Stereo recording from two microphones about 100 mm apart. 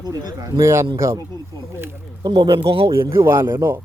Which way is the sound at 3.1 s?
25° right (ahead or behind).